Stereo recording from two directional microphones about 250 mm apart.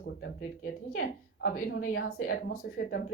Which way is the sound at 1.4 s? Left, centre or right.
Left.